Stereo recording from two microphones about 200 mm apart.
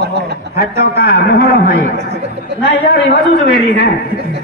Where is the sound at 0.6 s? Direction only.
50° left (ahead or behind).